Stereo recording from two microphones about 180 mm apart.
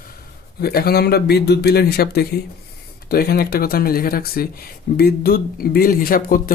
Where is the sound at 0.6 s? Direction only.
60° left (ahead or behind).